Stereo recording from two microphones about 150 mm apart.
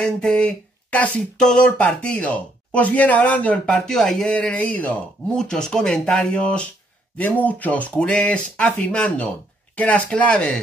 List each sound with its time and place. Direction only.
0.0 s speech: 5° left (ahead or behind)